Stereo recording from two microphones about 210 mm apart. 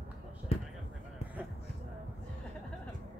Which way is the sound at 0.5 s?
30° left (ahead or behind).